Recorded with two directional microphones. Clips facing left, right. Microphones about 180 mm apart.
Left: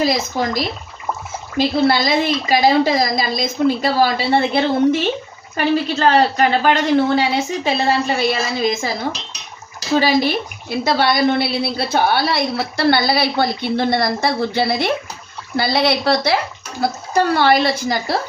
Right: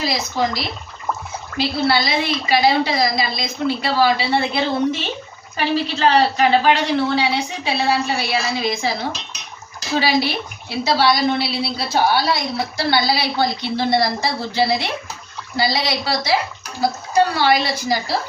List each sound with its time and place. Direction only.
0.0 s a woman's voice: 50° left (ahead or behind)
10.0 s a woman's voice: 45° left (ahead or behind)
17.3 s a woman's voice: 55° left (ahead or behind)